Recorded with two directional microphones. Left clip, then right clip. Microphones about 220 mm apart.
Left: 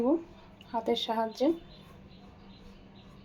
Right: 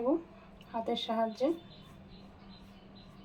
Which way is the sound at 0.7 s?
40° left (ahead or behind).